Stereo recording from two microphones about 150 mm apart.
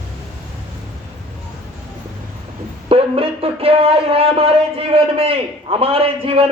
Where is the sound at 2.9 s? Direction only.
40° right (ahead or behind).